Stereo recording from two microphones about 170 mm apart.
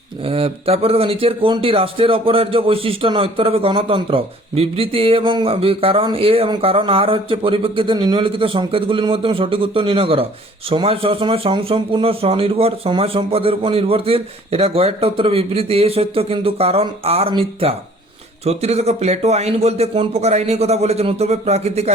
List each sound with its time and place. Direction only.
0.3 s speech: 35° right (ahead or behind)